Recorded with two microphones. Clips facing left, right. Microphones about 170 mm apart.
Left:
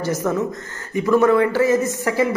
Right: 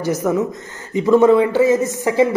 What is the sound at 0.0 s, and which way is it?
Speech, 20° right (ahead or behind).